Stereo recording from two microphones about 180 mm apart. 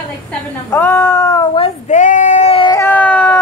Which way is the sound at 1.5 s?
35° left (ahead or behind).